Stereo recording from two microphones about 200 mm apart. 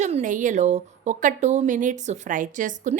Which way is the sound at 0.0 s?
40° right (ahead or behind).